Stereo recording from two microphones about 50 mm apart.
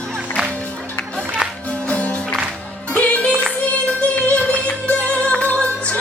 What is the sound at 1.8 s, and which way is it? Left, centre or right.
Music, left.